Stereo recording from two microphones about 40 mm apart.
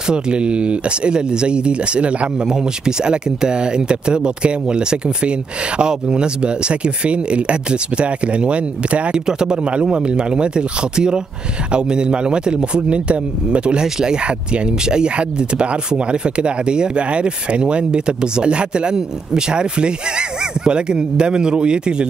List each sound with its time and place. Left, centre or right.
0.1 s speech: right
2.4 s speech: centre
9.1 s speech: centre